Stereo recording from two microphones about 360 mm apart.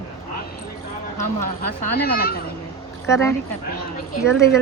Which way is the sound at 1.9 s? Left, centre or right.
Left.